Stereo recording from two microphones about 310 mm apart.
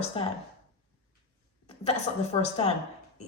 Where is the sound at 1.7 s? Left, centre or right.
Left.